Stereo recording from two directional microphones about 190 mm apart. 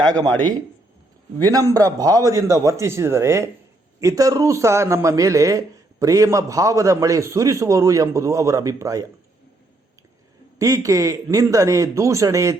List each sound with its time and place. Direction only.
0.1 s a man's voice: 20° right (ahead or behind)
10.6 s a man's voice: 15° right (ahead or behind)